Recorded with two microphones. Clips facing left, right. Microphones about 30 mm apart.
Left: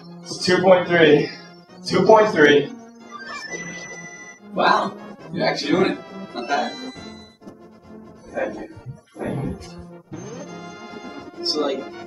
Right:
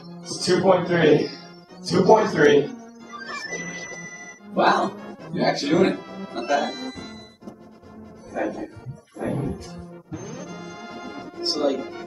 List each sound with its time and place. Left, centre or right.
0.4 s speech: left
3.1 s music: centre
4.6 s speech: left
4.9 s music: centre
5.6 s speech: centre
6.0 s music: centre
10.1 s music: centre
11.5 s speech: left